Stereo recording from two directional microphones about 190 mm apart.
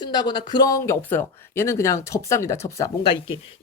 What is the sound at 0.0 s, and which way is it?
Speech, 20° left (ahead or behind).